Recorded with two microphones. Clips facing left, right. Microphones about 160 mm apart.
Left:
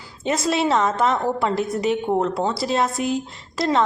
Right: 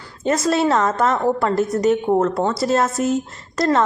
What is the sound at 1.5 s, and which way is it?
Speech, 40° right (ahead or behind).